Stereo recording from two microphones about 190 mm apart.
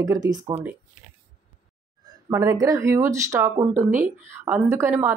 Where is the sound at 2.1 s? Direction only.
15° right (ahead or behind).